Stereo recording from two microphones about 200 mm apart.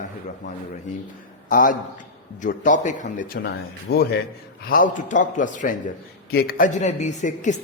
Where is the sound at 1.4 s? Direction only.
45° left (ahead or behind).